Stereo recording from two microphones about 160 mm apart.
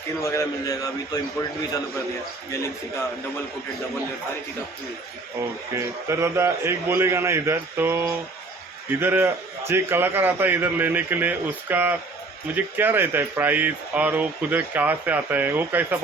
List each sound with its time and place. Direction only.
0.2 s a man's voice: 20° left (ahead or behind)
5.7 s speech: 15° right (ahead or behind)